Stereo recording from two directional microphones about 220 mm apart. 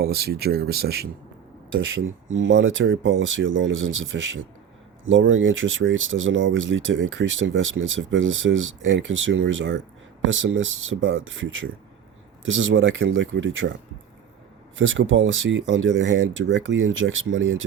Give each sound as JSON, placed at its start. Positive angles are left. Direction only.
{"t": 0.0, "sound": "speech", "side_deg": -45}
{"t": 2.3, "sound": "speech", "side_deg": -60}
{"t": 14.8, "sound": "speech", "side_deg": -60}